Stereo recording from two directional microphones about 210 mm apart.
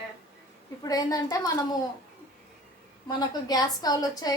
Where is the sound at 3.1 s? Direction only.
20° left (ahead or behind).